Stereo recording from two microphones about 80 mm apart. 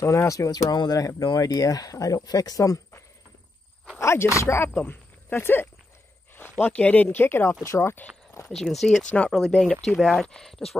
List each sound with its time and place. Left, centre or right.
0.0 s speech: left
0.7 s speech: left
4.0 s speech: left
8.5 s speech: centre
9.0 s speech: centre
9.5 s speech: centre